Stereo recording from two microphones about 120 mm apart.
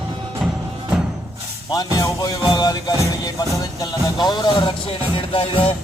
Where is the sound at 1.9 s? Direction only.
30° left (ahead or behind); by 5.7 s 50° left (ahead or behind).